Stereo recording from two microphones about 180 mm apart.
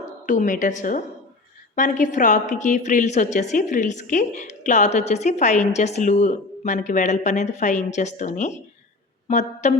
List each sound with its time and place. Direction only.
0.3 s a woman's voice: 45° left (ahead or behind)